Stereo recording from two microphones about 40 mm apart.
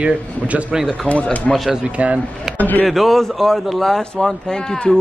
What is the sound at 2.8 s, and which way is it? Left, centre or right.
A man's voice, centre.